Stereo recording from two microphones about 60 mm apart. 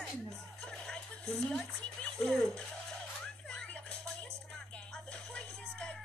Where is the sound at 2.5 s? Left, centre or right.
Centre.